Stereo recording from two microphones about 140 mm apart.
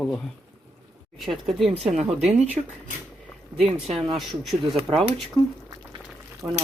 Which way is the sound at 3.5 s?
5° right (ahead or behind).